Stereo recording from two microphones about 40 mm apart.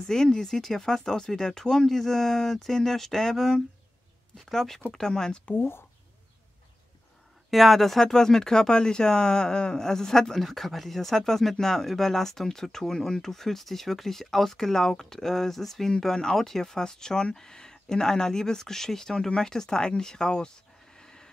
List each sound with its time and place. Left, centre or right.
0.0 s speech: centre
5.6 s speech: left
7.5 s speech: centre
20.0 s a sound: centre